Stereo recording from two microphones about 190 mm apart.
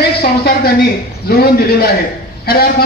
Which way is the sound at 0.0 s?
55° left (ahead or behind).